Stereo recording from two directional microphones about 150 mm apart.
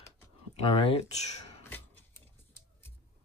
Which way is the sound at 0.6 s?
40° left (ahead or behind).